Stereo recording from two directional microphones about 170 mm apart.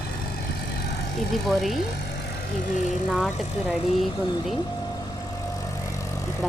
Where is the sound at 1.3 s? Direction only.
Centre (ahead or behind).